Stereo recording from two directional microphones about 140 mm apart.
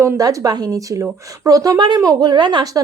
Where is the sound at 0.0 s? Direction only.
25° right (ahead or behind).